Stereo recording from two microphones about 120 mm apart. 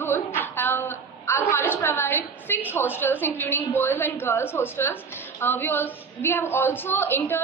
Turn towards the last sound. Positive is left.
turn(degrees=20)  # may be behind; listen again after turning